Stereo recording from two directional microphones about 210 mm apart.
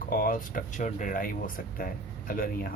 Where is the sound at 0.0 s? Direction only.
45° left (ahead or behind).